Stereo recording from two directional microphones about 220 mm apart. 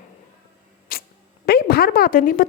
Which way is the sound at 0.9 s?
40° left (ahead or behind).